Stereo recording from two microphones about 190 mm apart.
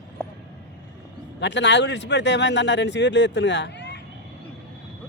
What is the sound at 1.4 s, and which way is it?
Speech, 70° left (ahead or behind).